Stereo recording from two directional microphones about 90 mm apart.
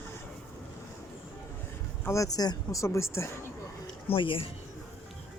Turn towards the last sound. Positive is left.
turn(degrees=80)